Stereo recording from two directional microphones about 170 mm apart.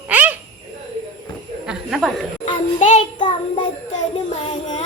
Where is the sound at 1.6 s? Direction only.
5° right (ahead or behind).